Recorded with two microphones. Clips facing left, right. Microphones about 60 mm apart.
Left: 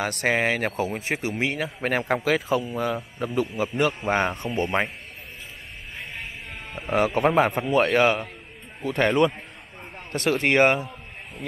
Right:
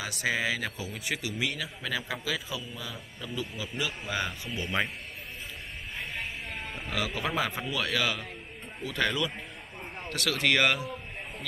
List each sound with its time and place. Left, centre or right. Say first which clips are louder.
0.0 s a man's voice: left 7 dB; left
1.0 s a man's voice: left 6 dB; left
5.9 s music: even; centre
6.9 s a man's voice: left 11 dB; left
10.0 s a man's voice: left 5 dB; left